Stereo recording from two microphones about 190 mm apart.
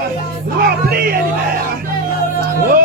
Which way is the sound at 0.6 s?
50° right (ahead or behind).